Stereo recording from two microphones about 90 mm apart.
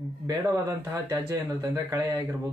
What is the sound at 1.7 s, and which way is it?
Speech, 40° right (ahead or behind).